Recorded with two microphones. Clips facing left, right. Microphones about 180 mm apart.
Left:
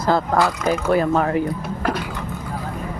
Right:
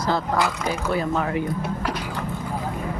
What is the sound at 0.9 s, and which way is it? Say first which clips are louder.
Speech: left 6 dB; 50° left (ahead or behind).